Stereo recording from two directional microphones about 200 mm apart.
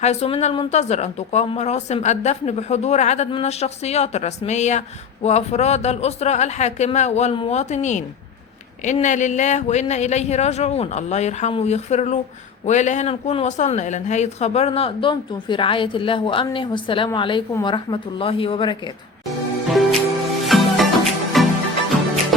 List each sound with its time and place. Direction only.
0.0 s speech: 30° left (ahead or behind)
19.6 s music: centre (ahead or behind)